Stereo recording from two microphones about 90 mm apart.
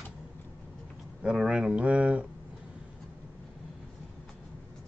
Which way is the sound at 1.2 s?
10° right (ahead or behind).